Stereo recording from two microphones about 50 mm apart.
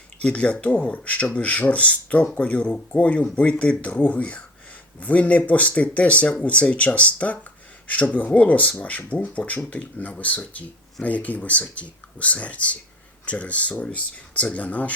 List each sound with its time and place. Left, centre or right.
0.2 s speech: left